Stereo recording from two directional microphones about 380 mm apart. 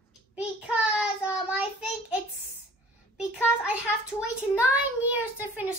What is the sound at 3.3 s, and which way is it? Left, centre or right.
Speech, left.